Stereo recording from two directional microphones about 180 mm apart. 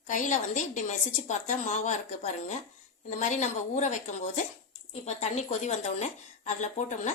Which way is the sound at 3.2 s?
45° left (ahead or behind).